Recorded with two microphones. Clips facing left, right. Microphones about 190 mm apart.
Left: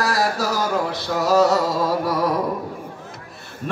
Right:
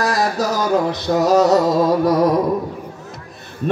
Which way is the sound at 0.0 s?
20° right (ahead or behind).